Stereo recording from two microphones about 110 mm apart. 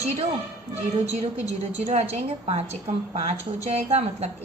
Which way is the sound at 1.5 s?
85° right.